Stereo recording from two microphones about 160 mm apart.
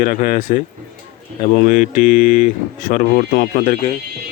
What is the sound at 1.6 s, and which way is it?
Speech, 55° left (ahead or behind).